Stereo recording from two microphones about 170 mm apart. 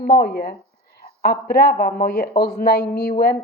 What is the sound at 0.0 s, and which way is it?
Speech, 65° left (ahead or behind).